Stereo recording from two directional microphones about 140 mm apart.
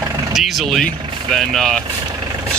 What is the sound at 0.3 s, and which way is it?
Speech, centre (ahead or behind).